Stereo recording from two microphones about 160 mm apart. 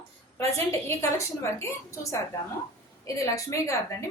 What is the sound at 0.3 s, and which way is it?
A woman's voice, 15° left (ahead or behind).